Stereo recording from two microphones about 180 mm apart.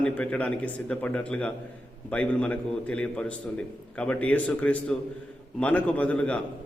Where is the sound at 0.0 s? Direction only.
5° left (ahead or behind).